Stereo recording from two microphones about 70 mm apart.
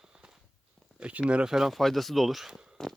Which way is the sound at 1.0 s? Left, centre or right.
Centre.